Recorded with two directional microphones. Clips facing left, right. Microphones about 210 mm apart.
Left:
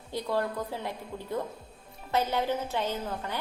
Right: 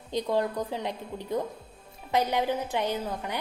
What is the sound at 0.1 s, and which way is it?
A woman's voice, 20° right (ahead or behind).